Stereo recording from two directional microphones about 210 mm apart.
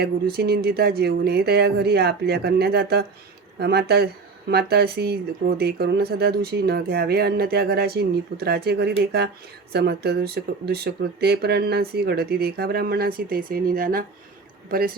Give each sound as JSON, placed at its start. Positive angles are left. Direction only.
{"t": 0.0, "sound": "speech", "side_deg": -50}